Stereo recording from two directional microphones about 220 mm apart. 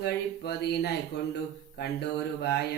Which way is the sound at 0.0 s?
45° left (ahead or behind).